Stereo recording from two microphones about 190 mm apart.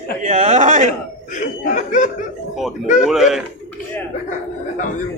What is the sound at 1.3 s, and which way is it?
Speech, 40° left (ahead or behind).